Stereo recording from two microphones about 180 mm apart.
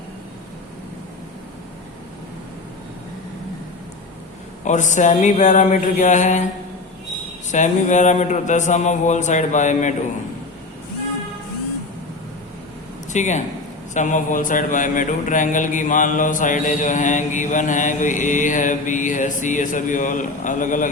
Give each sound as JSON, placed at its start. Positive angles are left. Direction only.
{"t": 4.6, "sound": "speech", "side_deg": 40}
{"t": 7.5, "sound": "speech", "side_deg": 40}
{"t": 13.1, "sound": "a man's voice", "side_deg": 40}